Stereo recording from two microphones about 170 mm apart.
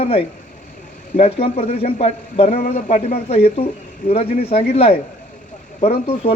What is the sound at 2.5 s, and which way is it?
Speech, 55° left (ahead or behind).